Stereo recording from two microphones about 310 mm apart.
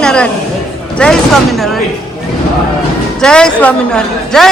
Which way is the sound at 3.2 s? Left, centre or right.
Centre.